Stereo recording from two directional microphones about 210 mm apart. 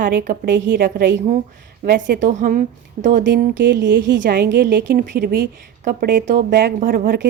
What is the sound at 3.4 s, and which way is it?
Speech, 60° right (ahead or behind).